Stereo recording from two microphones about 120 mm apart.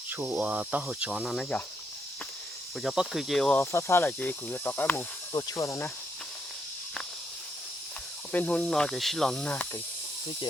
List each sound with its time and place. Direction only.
0.1 s speech: 15° right (ahead or behind); by 1.6 s 5° left (ahead or behind)
2.8 s cricket: 5° right (ahead or behind)
3.6 s speech: 25° left (ahead or behind)
5.3 s speech: 25° left (ahead or behind)
8.3 s speech: 10° left (ahead or behind)
9.5 s speech: 15° left (ahead or behind)